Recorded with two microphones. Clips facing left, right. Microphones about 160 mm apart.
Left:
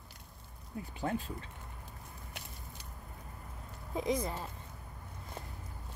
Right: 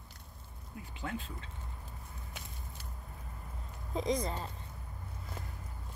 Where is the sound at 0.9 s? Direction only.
35° left (ahead or behind).